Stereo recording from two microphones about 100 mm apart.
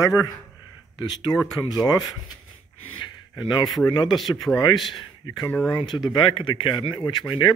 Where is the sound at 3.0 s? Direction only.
50° left (ahead or behind).